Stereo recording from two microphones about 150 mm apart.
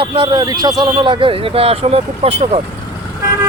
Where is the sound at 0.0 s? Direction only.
35° right (ahead or behind).